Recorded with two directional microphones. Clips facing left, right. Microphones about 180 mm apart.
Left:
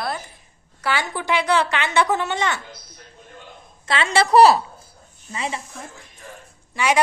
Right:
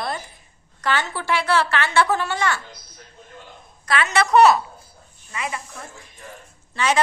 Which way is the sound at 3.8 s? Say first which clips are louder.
Left 1 dB; 30° left (ahead or behind).